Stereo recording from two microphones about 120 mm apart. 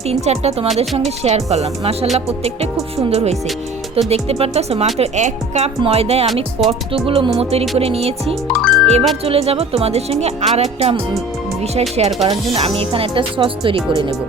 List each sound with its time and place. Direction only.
0.1 s speech: 60° right (ahead or behind)
4.9 s speech: 70° right (ahead or behind)
5.8 s speech: 55° right (ahead or behind)
8.4 s music: 5° left (ahead or behind)
9.2 s speech: 55° right (ahead or behind)